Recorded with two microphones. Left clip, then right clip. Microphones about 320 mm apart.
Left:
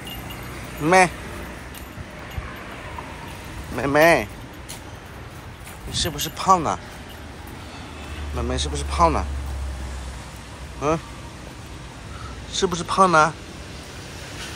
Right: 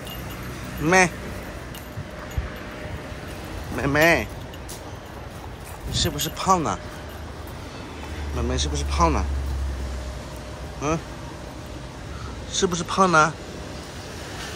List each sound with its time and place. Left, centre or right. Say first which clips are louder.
0.8 s speech: left 2 dB; centre
3.7 s speech: left 3 dB; centre
5.9 s speech: even; centre
8.4 s speech: left 1 dB; centre
10.8 s speech: left 3 dB; centre
12.5 s speech: left 2 dB; centre